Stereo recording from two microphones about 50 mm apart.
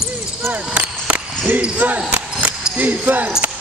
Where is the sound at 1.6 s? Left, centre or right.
Right.